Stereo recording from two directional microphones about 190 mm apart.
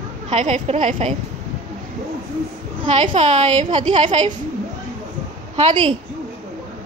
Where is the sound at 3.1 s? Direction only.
35° right (ahead or behind).